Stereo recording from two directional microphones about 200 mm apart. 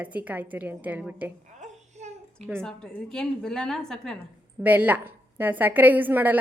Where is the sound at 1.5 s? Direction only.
35° right (ahead or behind).